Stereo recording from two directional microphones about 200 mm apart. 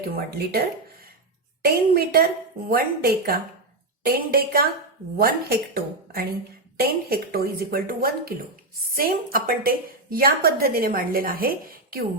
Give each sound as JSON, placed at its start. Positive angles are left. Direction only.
{"t": 0.0, "sound": "a woman's voice", "side_deg": -50}
{"t": 1.6, "sound": "a woman's voice", "side_deg": -50}